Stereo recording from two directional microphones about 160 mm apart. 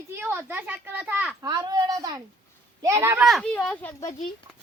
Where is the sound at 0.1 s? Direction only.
15° right (ahead or behind).